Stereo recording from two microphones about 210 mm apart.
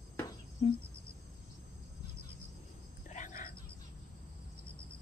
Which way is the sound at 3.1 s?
40° left (ahead or behind).